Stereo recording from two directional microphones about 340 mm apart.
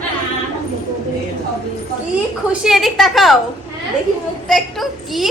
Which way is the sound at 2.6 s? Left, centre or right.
Centre.